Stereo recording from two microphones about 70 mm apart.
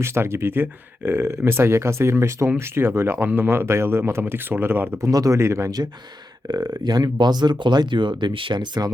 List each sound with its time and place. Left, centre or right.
0.0 s speech: right
4.9 s speech: right
5.4 s speech: right
6.5 s speech: right